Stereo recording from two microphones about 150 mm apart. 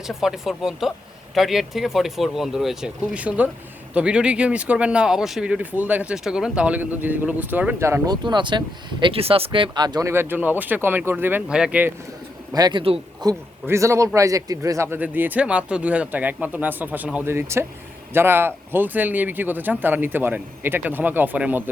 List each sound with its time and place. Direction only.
0.1 s speech: 5° right (ahead or behind); by 10.1 s 30° right (ahead or behind)
10.1 s speech: 15° right (ahead or behind)
12.5 s a man's voice: 25° right (ahead or behind); by 21.6 s 10° right (ahead or behind)